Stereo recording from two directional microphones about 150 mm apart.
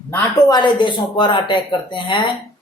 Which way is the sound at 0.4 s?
30° left (ahead or behind).